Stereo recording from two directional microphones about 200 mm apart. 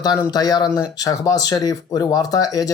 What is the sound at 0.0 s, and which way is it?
Speech, 20° left (ahead or behind).